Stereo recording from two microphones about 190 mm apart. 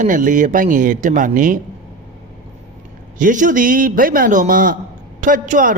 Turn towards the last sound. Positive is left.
turn(degrees=-45)  # may be behind; listen again after turning